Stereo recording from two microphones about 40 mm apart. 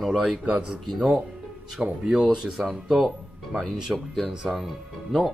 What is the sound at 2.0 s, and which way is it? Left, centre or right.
Speech, centre.